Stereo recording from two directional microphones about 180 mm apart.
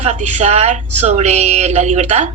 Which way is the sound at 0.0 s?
40° right (ahead or behind).